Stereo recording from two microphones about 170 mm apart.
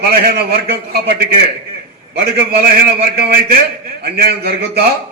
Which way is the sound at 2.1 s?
65° right (ahead or behind).